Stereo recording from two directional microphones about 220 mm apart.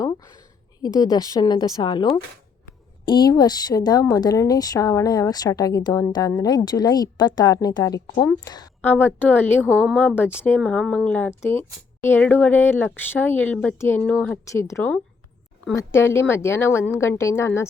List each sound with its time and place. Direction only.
0.8 s speech: 15° left (ahead or behind)